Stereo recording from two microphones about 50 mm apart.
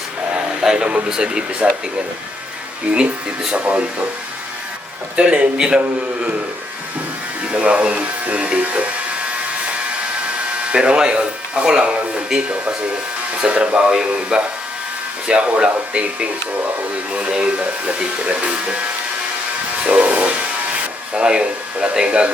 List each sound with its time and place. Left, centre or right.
0.6 s a sound: centre
0.9 s speech: centre
2.8 s speech: right
5.1 s speech: right
7.4 s speech: right
10.7 s speech: centre
19.8 s a sound: right
21.2 s speech: centre